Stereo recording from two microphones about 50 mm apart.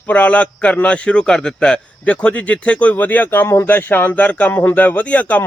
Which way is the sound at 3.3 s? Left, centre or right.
Left.